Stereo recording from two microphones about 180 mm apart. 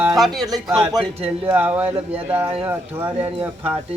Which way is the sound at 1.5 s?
10° right (ahead or behind).